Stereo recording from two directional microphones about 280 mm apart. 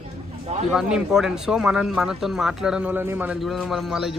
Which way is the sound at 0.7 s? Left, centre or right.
Centre.